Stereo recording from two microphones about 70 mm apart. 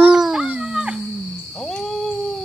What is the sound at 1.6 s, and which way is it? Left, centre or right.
Cat, centre.